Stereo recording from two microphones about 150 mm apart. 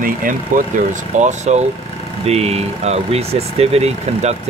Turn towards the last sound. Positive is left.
turn(degrees=-45)  # may be behind; listen again after turning